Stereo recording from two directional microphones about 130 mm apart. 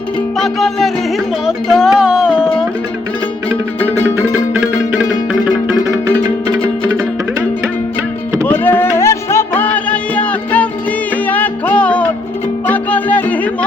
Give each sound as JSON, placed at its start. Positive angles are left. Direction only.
{"t": 0.3, "sound": "music", "side_deg": 0}
{"t": 5.3, "sound": "music", "side_deg": -10}
{"t": 6.5, "sound": "music", "side_deg": -25}
{"t": 8.4, "sound": "music", "side_deg": 15}